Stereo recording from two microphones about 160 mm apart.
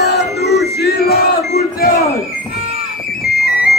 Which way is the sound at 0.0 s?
90° left.